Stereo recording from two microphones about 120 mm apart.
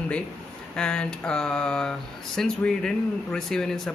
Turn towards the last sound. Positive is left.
turn(degrees=5)  # may be behind; listen again after turning